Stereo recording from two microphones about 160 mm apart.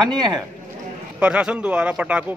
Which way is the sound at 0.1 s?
25° right (ahead or behind).